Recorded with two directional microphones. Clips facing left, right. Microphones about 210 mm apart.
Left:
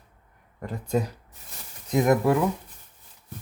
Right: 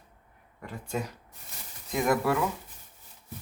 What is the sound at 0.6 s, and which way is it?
Speech, 40° left (ahead or behind).